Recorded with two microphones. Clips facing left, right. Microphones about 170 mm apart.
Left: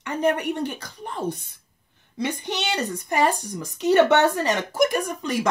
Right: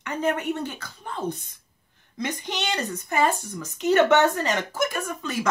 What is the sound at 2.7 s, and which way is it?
Speech, 15° left (ahead or behind).